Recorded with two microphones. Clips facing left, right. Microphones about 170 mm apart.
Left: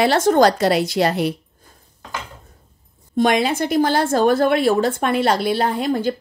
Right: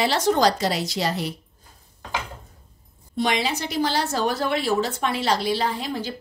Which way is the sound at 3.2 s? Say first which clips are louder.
Left 7 dB; 50° left (ahead or behind).